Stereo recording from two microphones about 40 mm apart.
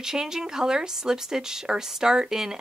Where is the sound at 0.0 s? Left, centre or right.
Centre.